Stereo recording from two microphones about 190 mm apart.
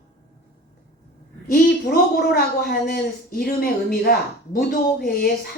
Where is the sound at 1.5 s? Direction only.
50° left (ahead or behind).